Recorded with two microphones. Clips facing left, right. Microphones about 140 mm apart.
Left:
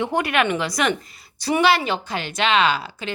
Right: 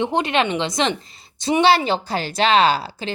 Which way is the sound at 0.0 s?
20° right (ahead or behind).